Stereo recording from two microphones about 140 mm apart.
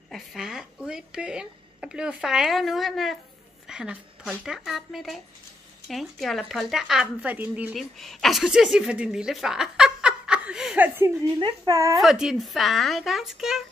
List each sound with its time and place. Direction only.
0.1 s speech: centre (ahead or behind)
7.7 s speech: centre (ahead or behind)
11.3 s speech: 30° right (ahead or behind)
12.0 s speech: 5° right (ahead or behind)